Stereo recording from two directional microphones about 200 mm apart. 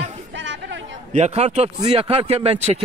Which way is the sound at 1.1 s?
30° right (ahead or behind).